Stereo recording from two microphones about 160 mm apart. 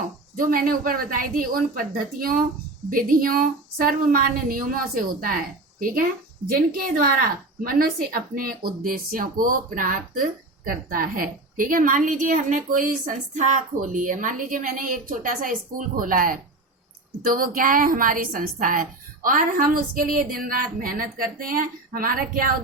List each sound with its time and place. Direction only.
0.3 s a woman's voice: 60° right (ahead or behind)